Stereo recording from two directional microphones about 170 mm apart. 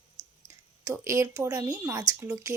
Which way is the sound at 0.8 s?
20° right (ahead or behind).